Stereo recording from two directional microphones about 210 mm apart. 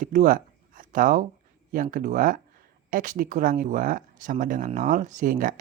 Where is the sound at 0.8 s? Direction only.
40° right (ahead or behind).